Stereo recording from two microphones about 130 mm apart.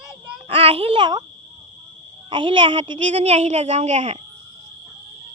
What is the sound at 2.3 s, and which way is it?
Speech, 40° right (ahead or behind).